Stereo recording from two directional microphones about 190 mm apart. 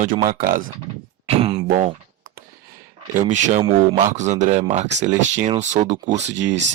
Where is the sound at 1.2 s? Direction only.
30° right (ahead or behind).